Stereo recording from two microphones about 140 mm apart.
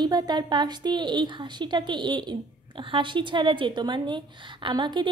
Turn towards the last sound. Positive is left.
turn(degrees=-30)  # may be behind; listen again after turning